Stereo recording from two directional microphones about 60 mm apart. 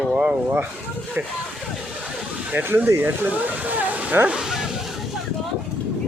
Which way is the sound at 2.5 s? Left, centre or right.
Right.